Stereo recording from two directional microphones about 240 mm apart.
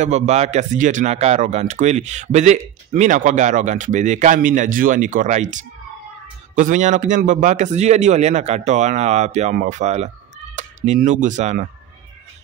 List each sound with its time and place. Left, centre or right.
0.0 s a man's voice: right